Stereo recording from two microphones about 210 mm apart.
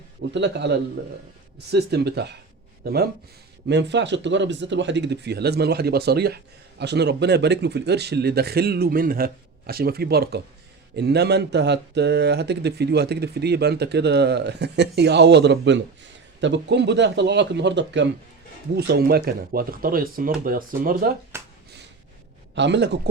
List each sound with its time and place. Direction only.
0.3 s a man's voice: 55° right (ahead or behind)
21.3 s a sound: 10° right (ahead or behind)
22.5 s a man's voice: 55° right (ahead or behind)